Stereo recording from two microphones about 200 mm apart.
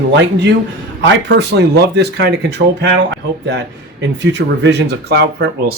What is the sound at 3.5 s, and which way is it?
A man's voice, 60° right (ahead or behind).